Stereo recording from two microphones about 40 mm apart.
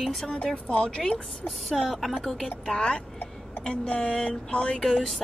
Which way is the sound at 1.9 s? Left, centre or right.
Centre.